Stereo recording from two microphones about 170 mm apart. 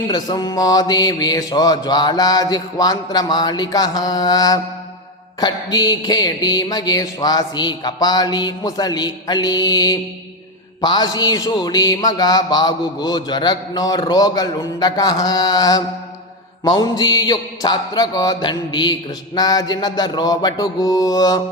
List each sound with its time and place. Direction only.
0.1 s speech: 25° left (ahead or behind)